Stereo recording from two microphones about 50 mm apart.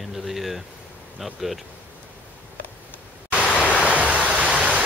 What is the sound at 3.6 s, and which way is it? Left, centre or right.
Waves, left.